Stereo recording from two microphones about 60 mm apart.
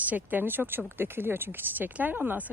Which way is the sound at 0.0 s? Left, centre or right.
Right.